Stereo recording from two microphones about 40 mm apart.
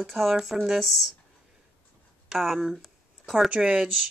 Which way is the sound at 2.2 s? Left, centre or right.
Centre.